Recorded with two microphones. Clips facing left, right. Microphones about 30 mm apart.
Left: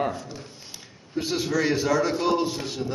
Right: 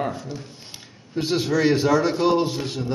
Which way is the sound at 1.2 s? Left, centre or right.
Right.